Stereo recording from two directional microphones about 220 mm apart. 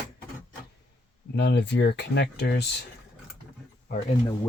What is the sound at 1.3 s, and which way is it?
Speech, 50° left (ahead or behind).